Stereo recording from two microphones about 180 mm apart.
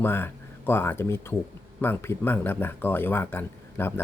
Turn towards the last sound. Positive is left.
turn(degrees=10)  # may be behind; listen again after turning